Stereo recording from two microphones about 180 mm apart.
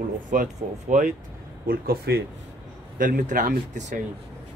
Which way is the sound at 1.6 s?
60° right (ahead or behind).